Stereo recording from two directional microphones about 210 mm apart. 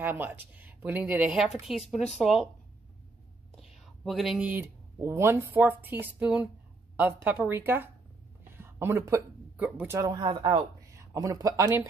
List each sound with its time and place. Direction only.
0.0 s speech: 10° right (ahead or behind)
4.0 s speech: centre (ahead or behind)